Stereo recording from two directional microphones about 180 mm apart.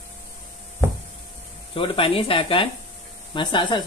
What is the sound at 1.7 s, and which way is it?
Speech, 30° left (ahead or behind).